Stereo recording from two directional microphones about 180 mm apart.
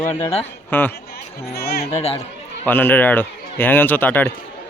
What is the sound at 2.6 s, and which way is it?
Speech, 10° left (ahead or behind).